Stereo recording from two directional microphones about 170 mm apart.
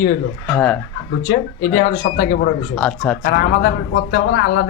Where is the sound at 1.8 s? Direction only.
55° left (ahead or behind).